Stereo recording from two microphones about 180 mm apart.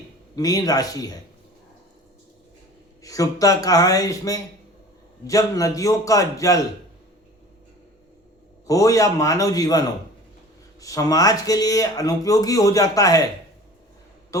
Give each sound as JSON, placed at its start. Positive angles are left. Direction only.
{"t": 0.3, "sound": "speech", "side_deg": 20}
{"t": 3.0, "sound": "speech", "side_deg": 20}
{"t": 8.6, "sound": "speech", "side_deg": 20}